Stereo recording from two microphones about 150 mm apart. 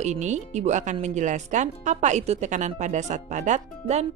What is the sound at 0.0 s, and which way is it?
Speech, 50° right (ahead or behind).